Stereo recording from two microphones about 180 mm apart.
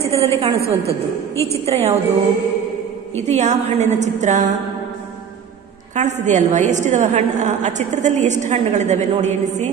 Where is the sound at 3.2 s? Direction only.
40° right (ahead or behind).